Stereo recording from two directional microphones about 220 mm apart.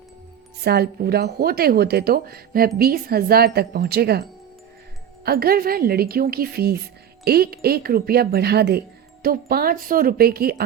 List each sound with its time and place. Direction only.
0.6 s speech: 45° right (ahead or behind)